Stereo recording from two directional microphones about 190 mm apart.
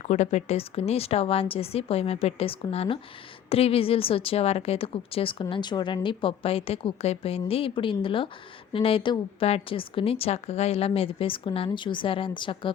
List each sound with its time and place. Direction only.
0.0 s a woman's voice: 35° left (ahead or behind)